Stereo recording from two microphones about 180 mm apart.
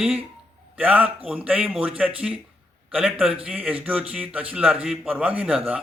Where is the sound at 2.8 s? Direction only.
5° right (ahead or behind).